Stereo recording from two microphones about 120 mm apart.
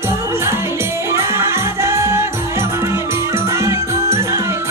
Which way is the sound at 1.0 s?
20° right (ahead or behind).